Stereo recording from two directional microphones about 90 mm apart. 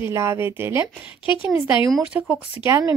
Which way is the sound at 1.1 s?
70° left (ahead or behind).